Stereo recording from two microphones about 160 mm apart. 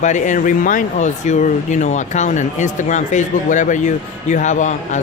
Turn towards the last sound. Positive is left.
turn(degrees=50)  # may be behind; listen again after turning